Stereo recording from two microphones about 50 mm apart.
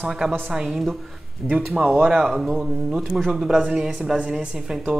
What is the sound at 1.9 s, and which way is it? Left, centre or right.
Speech, right.